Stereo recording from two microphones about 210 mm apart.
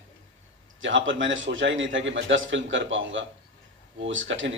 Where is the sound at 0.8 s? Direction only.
65° right (ahead or behind).